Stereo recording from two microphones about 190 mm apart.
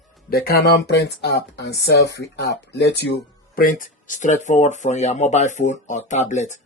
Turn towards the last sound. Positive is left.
turn(degrees=40)  # may be behind; listen again after turning